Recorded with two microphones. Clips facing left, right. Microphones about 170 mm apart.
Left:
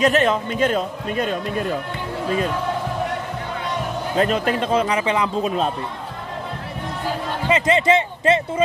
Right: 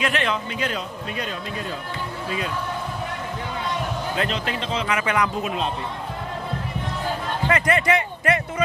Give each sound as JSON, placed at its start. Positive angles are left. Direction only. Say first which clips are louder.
{"t": 0.0, "sound": "a man's voice", "louder": "left 7 dB", "side_deg": 40}
{"t": 4.2, "sound": "a man's voice", "louder": "left 10 dB", "side_deg": 50}
{"t": 4.8, "sound": "speech", "louder": "left 2 dB", "side_deg": 30}
{"t": 7.4, "sound": "speech", "louder": "left 4 dB", "side_deg": 20}